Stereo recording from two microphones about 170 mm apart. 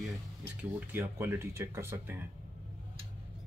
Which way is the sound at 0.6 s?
10° right (ahead or behind).